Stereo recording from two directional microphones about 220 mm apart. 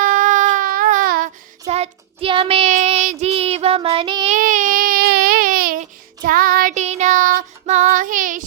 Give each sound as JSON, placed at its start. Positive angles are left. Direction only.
{"t": 0.0, "sound": "baby cry", "side_deg": -35}
{"t": 1.6, "sound": "child singing", "side_deg": -30}
{"t": 4.4, "sound": "baby cry", "side_deg": -35}